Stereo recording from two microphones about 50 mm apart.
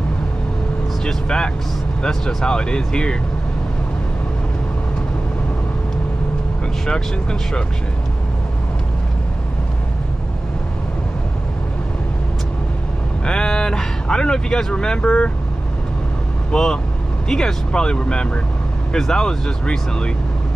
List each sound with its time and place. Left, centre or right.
1.0 s speech: centre
6.9 s speech: centre
13.2 s speech: centre
16.5 s speech: centre